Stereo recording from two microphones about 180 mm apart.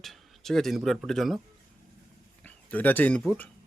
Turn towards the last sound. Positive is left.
turn(degrees=5)  # may be behind; listen again after turning